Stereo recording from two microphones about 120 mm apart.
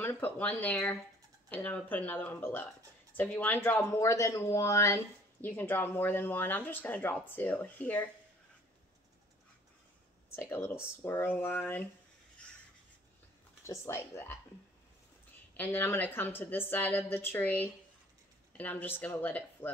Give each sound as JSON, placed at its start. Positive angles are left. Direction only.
{"t": 0.0, "sound": "speech", "side_deg": 15}
{"t": 10.3, "sound": "speech", "side_deg": 20}
{"t": 13.7, "sound": "speech", "side_deg": 20}
{"t": 15.5, "sound": "speech", "side_deg": 15}